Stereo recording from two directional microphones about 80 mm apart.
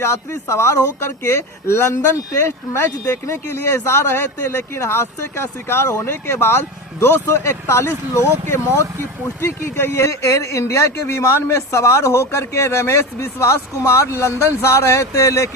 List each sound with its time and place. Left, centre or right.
0.0 s speech: left